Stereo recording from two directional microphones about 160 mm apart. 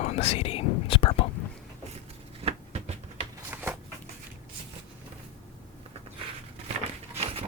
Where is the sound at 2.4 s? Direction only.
40° right (ahead or behind).